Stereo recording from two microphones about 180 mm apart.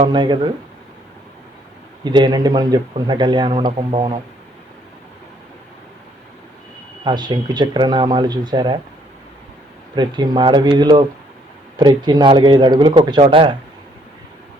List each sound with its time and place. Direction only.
0.1 s speech: 25° right (ahead or behind)
2.0 s speech: 25° right (ahead or behind)
7.0 s speech: 25° right (ahead or behind)
9.9 s speech: 25° right (ahead or behind)